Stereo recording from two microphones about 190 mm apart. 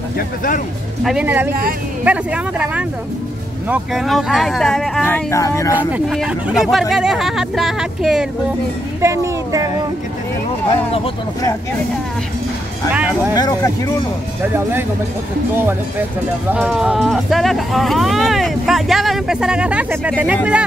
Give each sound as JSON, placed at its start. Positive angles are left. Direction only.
{"t": 1.0, "sound": "speech", "side_deg": -5}
{"t": 5.8, "sound": "speech", "side_deg": -5}
{"t": 9.0, "sound": "speech", "side_deg": -15}
{"t": 12.9, "sound": "speech", "side_deg": -10}
{"t": 13.3, "sound": "speech", "side_deg": 20}
{"t": 14.4, "sound": "speech", "side_deg": -10}
{"t": 16.5, "sound": "speech", "side_deg": -5}